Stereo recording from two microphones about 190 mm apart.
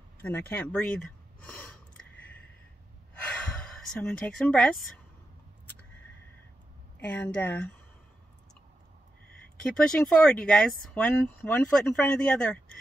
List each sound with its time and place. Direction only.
0.2 s a sound: 10° left (ahead or behind)
3.2 s gasp: 5° left (ahead or behind)
7.0 s a woman's voice: 5° left (ahead or behind)
9.6 s speech: 5° left (ahead or behind)